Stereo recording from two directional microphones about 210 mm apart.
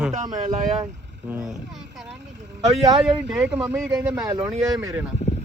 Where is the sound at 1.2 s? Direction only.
10° right (ahead or behind).